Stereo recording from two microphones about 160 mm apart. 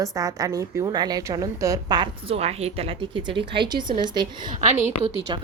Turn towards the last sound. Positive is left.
turn(degrees=-50)  # may be behind; listen again after turning